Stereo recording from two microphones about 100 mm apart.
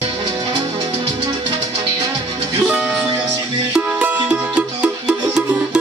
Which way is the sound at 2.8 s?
10° right (ahead or behind).